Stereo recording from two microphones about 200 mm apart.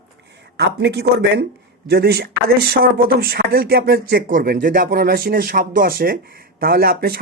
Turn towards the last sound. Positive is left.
turn(degrees=-50)  # may be behind; listen again after turning